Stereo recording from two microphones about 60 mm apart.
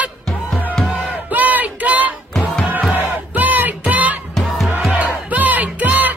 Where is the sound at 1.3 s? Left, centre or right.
Right.